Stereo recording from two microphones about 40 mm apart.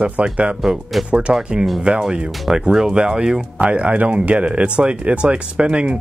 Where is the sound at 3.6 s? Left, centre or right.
Right.